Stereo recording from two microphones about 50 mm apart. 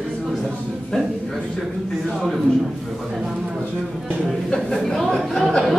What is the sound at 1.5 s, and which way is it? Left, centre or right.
Speech, centre.